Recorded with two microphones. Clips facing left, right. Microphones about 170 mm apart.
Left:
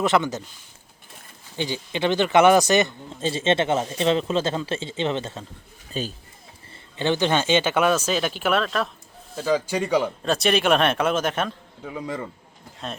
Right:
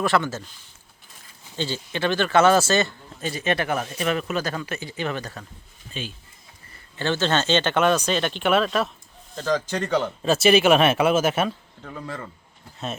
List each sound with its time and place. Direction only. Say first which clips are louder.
0.0 s speech: left 1 dB; 20° left (ahead or behind)
1.5 s speech: left 1 dB; 15° left (ahead or behind)
5.9 s speech: left 5 dB; 40° left (ahead or behind)
6.9 s speech: left 1 dB; 15° left (ahead or behind); by 8.9 s 5° right (ahead or behind)
9.3 s speech: left 2 dB; 10° left (ahead or behind)
10.2 s speech: right 6 dB; 5° right (ahead or behind)
11.8 s speech: left 8 dB; 10° left (ahead or behind)